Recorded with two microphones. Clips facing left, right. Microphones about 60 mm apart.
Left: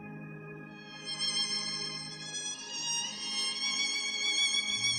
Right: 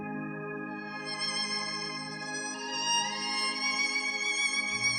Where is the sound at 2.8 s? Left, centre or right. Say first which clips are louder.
Right 10 dB; right.